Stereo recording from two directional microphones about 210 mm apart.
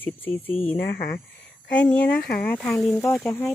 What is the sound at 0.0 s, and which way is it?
Speech, 10° left (ahead or behind).